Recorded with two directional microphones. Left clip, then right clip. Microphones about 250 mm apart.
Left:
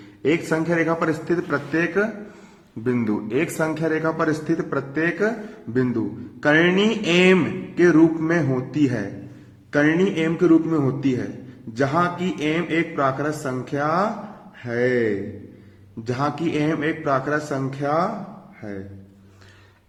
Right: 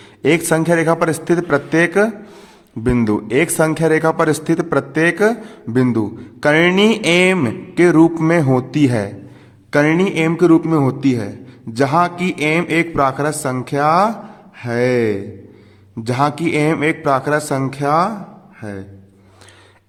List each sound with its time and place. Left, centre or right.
0.2 s music: right